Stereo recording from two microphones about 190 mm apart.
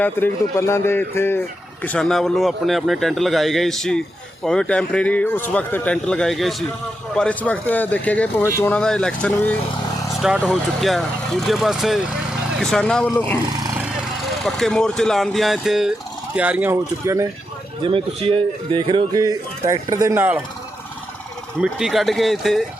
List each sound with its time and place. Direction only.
0.0 s a man's voice: 10° left (ahead or behind)
14.4 s a man's voice: 5° left (ahead or behind); by 17.2 s 15° right (ahead or behind)
17.8 s speech: 30° right (ahead or behind); by 20.4 s 10° right (ahead or behind)
21.6 s a man's voice: centre (ahead or behind)